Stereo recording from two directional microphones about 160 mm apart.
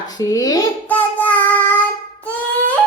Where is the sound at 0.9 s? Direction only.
10° left (ahead or behind).